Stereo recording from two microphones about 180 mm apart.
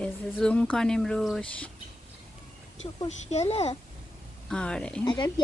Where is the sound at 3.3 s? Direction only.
35° left (ahead or behind).